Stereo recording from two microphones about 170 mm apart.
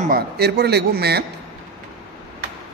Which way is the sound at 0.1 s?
75° right (ahead or behind).